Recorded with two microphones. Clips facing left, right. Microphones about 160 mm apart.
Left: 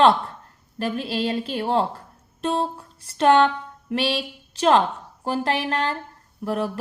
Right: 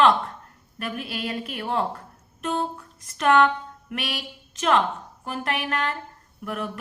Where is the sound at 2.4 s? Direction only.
30° left (ahead or behind).